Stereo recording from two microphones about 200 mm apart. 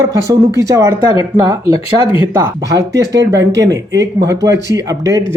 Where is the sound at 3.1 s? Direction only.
60° right (ahead or behind).